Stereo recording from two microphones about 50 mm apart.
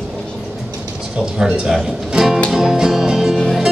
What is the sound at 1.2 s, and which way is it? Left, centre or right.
Speech, centre.